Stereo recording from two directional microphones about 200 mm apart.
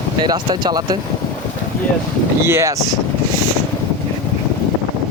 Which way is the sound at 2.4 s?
15° right (ahead or behind).